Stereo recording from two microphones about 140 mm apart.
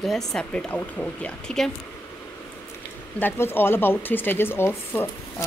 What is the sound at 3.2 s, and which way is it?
Speech, 15° left (ahead or behind).